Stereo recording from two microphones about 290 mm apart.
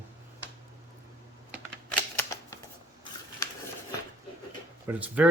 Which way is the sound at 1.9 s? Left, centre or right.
Centre.